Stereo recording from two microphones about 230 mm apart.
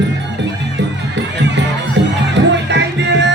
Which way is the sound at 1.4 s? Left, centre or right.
Right.